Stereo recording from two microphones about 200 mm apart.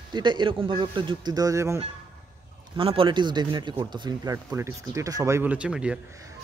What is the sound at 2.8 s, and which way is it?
Speech, 25° right (ahead or behind).